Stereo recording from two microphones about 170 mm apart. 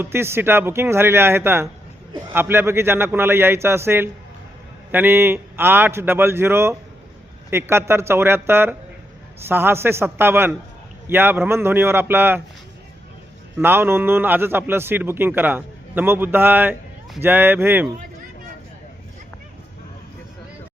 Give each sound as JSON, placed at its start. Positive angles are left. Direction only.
{"t": 0.0, "sound": "a man's voice", "side_deg": -15}
{"t": 13.6, "sound": "a man's voice", "side_deg": -15}